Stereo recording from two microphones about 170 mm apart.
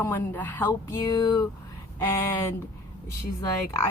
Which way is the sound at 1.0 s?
20° left (ahead or behind).